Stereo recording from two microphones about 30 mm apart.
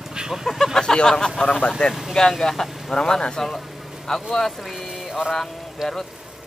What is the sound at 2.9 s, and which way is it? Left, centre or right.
Speech, left.